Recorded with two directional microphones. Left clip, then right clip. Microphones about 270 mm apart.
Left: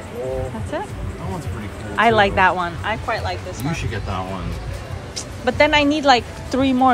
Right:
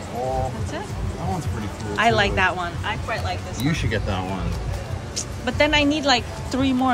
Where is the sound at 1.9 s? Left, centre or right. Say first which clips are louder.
Left 4 dB; centre.